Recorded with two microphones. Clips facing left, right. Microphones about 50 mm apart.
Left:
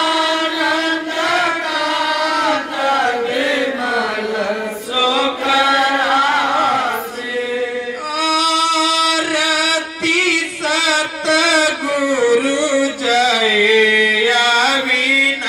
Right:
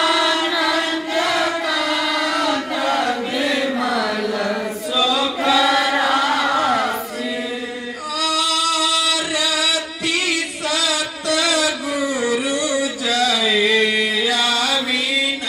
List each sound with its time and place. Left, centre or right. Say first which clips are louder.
0.1 s music: left 1 dB; left
1.3 s child singing: left 3 dB; left
2.3 s chant: left 3 dB; left
4.9 s chant: left 3 dB; left
8.2 s music: left 5 dB; left